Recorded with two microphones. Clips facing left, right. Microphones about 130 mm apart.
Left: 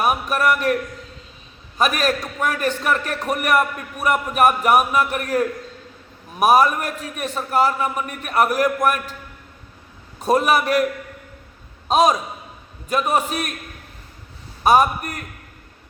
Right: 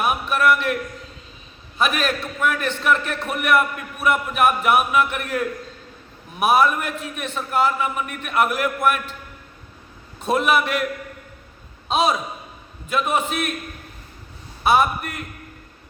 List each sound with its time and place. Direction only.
0.0 s a man's voice: 40° left (ahead or behind)
1.8 s a man's voice: 40° left (ahead or behind)
10.2 s a man's voice: 40° left (ahead or behind)
11.9 s a man's voice: 40° left (ahead or behind)
14.6 s a man's voice: 40° left (ahead or behind)